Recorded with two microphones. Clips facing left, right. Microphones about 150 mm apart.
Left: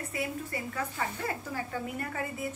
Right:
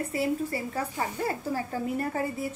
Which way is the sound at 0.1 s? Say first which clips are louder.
Right 6 dB; 30° right (ahead or behind).